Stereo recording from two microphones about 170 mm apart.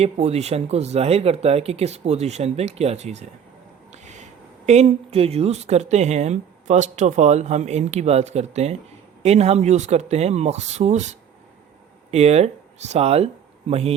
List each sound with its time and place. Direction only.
0.0 s speech: 40° right (ahead or behind)
12.1 s speech: 40° right (ahead or behind)